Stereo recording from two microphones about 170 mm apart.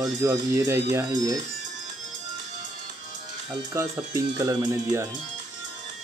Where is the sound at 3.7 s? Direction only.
20° right (ahead or behind).